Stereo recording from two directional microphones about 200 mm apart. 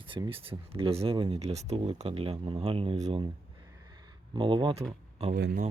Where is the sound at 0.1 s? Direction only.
25° right (ahead or behind).